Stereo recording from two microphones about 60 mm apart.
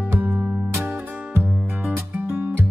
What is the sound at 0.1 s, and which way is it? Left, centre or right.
Music, right.